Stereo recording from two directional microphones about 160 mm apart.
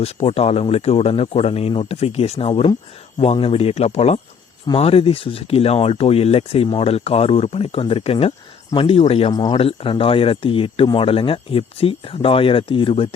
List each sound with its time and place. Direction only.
0.0 s speech: 40° left (ahead or behind)
9.3 s speech: 25° left (ahead or behind)
9.6 s speech: 35° left (ahead or behind)